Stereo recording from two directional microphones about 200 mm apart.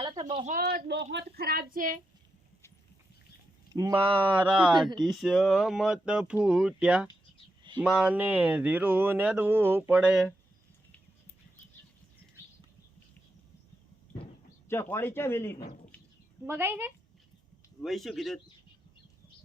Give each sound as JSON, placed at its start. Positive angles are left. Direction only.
{"t": 0.0, "sound": "a sound", "side_deg": -20}
{"t": 0.4, "sound": "speech", "side_deg": -45}
{"t": 3.8, "sound": "speech", "side_deg": -20}
{"t": 4.4, "sound": "speech", "side_deg": -5}
{"t": 14.7, "sound": "speech", "side_deg": 10}
{"t": 16.5, "sound": "speech", "side_deg": -10}
{"t": 17.8, "sound": "speech", "side_deg": 0}